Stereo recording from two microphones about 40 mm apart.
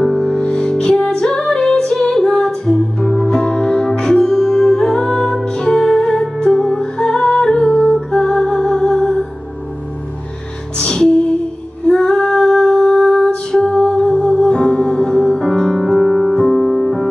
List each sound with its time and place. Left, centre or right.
0.2 s music: centre
10.8 s music: centre
11.8 s female singing: centre
15.6 s music: centre